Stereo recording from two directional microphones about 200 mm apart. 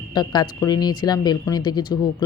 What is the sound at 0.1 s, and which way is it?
Speech, 20° left (ahead or behind).